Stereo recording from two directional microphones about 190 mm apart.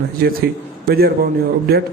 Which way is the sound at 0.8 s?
55° right (ahead or behind).